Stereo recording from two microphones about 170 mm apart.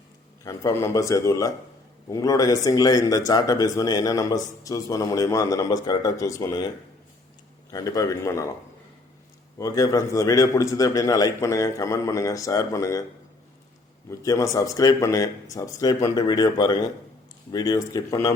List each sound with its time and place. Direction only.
0.4 s speech: 20° left (ahead or behind)
7.7 s speech: 20° left (ahead or behind)
9.6 s speech: 20° left (ahead or behind)
14.1 s speech: 20° left (ahead or behind)